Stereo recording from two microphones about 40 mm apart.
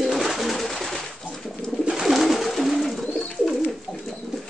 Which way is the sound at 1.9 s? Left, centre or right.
Centre.